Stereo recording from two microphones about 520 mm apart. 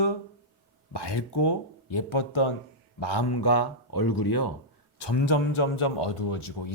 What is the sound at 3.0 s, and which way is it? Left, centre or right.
A man's voice, left.